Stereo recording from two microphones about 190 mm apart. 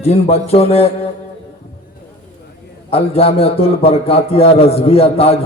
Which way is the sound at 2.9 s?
30° left (ahead or behind).